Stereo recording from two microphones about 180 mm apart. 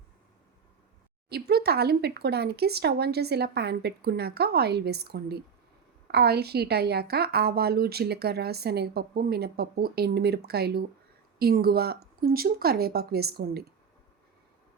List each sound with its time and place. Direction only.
1.3 s a woman's voice: 60° right (ahead or behind)